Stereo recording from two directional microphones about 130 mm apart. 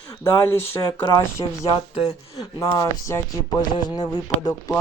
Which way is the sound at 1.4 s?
35° left (ahead or behind).